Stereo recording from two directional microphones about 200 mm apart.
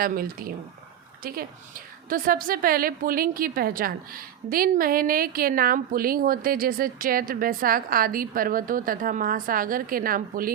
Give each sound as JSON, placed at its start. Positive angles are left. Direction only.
{"t": 0.0, "sound": "a woman's voice", "side_deg": -45}